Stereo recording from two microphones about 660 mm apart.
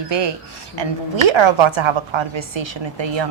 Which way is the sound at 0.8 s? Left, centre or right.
Right.